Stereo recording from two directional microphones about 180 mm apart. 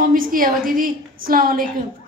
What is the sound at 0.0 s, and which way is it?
A woman's voice, 50° right (ahead or behind).